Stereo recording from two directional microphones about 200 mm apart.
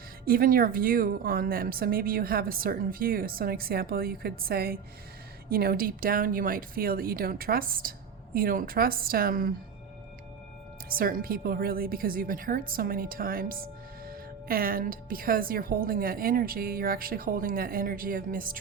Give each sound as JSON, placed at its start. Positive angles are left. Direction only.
{"t": 0.3, "sound": "a woman's voice", "side_deg": -45}
{"t": 10.8, "sound": "a woman's voice", "side_deg": -45}